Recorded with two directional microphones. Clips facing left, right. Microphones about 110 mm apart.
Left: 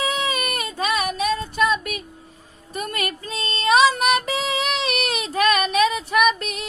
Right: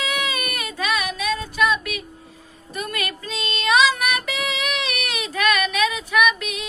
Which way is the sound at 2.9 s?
30° left (ahead or behind).